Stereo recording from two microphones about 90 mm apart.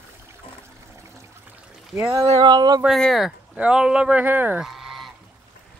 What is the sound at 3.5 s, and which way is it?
Speech, 10° right (ahead or behind).